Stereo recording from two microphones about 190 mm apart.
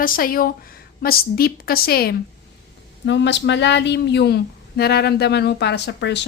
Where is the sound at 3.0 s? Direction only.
70° left (ahead or behind).